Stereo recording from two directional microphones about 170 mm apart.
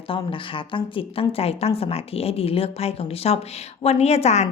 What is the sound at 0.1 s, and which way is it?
A woman's voice, 30° left (ahead or behind).